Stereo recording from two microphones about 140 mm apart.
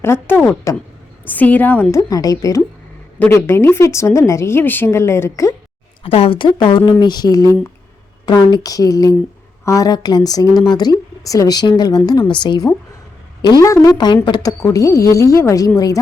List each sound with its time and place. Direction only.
0.0 s a woman's voice: 15° left (ahead or behind)
2.0 s a woman's voice: 25° left (ahead or behind)
6.0 s a woman's voice: 40° left (ahead or behind); by 15.7 s 25° left (ahead or behind)